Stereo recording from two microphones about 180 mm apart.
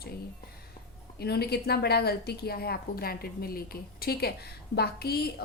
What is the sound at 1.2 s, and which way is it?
A woman's voice, 60° left (ahead or behind).